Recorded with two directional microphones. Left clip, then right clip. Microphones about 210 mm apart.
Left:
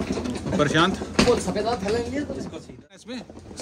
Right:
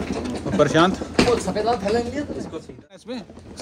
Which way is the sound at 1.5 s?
15° left (ahead or behind).